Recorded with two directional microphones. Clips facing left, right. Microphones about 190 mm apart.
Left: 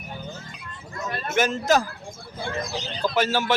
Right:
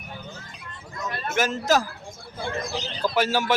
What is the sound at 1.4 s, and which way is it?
Speech, 5° right (ahead or behind).